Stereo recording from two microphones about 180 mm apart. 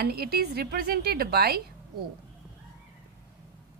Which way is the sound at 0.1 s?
60° right (ahead or behind).